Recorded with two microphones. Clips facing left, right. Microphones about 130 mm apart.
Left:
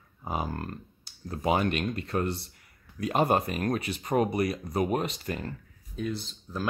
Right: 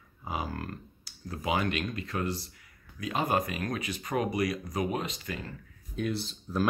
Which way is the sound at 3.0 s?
50° left (ahead or behind).